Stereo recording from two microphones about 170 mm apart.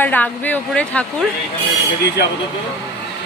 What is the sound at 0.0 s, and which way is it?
Speech, 10° left (ahead or behind).